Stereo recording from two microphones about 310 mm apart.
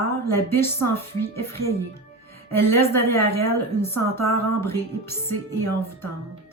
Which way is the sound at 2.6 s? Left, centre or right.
Centre.